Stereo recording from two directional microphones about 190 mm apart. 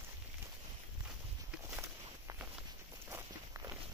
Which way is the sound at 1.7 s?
10° right (ahead or behind).